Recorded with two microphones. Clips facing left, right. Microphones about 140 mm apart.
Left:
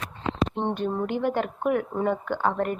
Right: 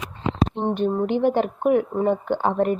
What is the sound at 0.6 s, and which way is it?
Speech, 15° right (ahead or behind).